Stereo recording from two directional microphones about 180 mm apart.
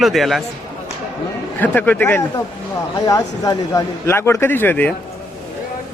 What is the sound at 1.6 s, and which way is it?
A man's voice, 10° left (ahead or behind).